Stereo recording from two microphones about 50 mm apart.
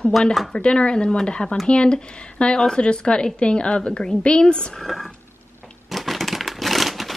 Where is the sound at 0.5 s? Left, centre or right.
Centre.